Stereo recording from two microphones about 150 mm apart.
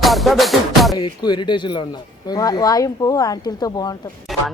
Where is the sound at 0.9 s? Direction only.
30° left (ahead or behind).